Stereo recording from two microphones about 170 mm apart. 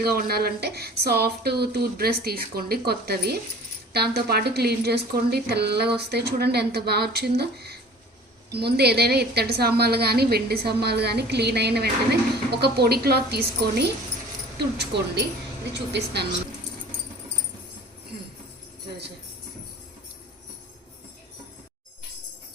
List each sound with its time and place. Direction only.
0.0 s a woman's voice: 65° right (ahead or behind)